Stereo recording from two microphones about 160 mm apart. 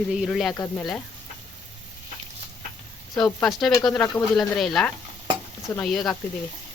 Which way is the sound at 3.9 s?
Centre (ahead or behind).